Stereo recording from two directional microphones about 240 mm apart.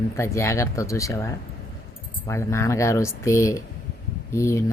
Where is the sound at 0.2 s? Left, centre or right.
Centre.